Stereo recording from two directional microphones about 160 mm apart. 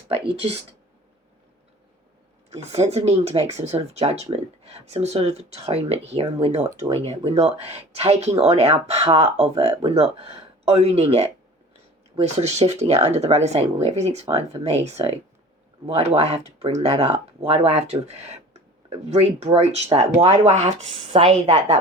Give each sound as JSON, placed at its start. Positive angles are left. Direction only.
{"t": 0.3, "sound": "speech", "side_deg": -40}
{"t": 2.5, "sound": "speech", "side_deg": -40}